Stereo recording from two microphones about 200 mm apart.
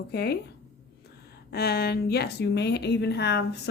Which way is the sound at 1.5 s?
50° left (ahead or behind).